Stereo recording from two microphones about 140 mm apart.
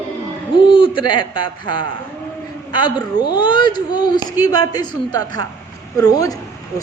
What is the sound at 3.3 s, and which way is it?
A woman's voice, 35° left (ahead or behind).